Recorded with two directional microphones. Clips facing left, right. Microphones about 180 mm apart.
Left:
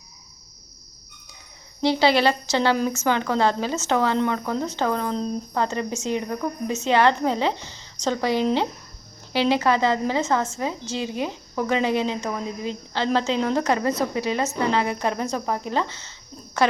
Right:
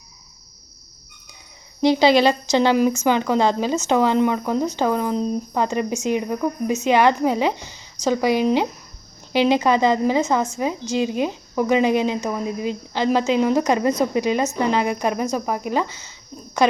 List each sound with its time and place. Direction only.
1.8 s a woman's voice: 15° right (ahead or behind)